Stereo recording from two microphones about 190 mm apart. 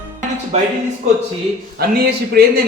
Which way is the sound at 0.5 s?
35° right (ahead or behind).